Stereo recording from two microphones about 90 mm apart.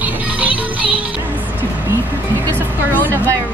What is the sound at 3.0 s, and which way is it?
Speech, 20° right (ahead or behind).